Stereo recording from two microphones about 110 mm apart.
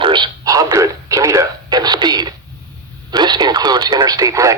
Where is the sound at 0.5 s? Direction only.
30° right (ahead or behind).